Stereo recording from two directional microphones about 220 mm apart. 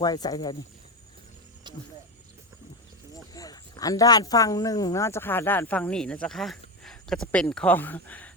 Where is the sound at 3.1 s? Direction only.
15° left (ahead or behind).